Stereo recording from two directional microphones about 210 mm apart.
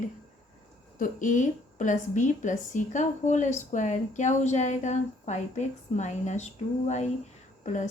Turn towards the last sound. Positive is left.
turn(degrees=35)  # may be behind; listen again after turning